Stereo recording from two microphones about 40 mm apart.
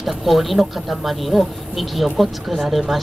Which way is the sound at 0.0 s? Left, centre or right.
Centre.